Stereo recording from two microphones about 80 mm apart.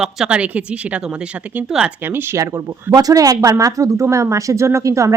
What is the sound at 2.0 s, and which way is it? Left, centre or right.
Speech, right.